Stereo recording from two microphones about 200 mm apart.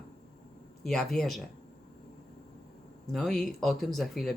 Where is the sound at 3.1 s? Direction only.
Centre (ahead or behind).